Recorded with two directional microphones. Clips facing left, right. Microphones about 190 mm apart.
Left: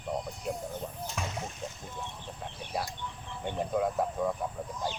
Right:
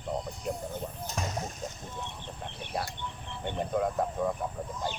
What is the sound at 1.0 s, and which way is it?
Speech, 40° right (ahead or behind).